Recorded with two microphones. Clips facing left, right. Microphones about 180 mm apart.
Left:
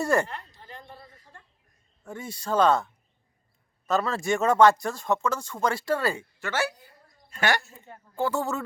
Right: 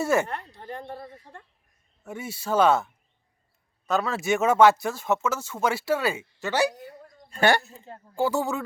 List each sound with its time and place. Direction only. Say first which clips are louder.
0.0 s a woman's voice: right 1 dB; 5° right (ahead or behind)
0.3 s a sound: right 6 dB; 60° right (ahead or behind)
2.0 s speech: right 1 dB; 5° right (ahead or behind)
6.4 s speech: right 5 dB; 15° right (ahead or behind)
7.3 s speech: right 5 dB; 30° right (ahead or behind)
8.2 s speech: right 2 dB; 5° right (ahead or behind)